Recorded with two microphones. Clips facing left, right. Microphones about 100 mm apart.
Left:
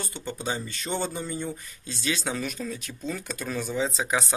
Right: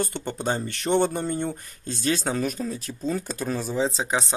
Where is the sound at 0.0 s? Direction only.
60° right (ahead or behind).